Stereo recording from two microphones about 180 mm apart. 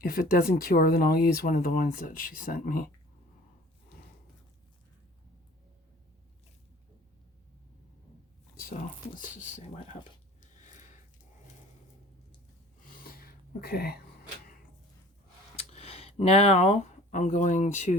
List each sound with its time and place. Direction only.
0.0 s speech: 55° left (ahead or behind)
9.1 s speech: 45° left (ahead or behind)
12.8 s a sound: 55° left (ahead or behind)
15.5 s speech: 35° left (ahead or behind)